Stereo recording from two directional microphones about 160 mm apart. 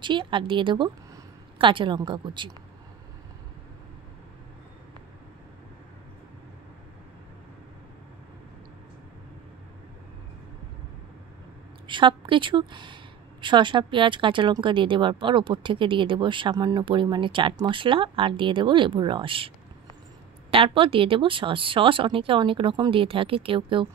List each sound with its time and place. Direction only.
0.0 s a woman's voice: 30° right (ahead or behind)
11.9 s a woman's voice: 30° right (ahead or behind)